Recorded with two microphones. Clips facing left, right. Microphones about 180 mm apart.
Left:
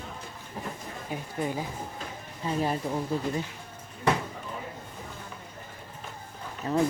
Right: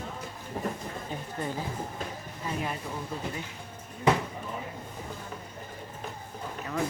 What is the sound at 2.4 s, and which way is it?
Speech, 30° left (ahead or behind).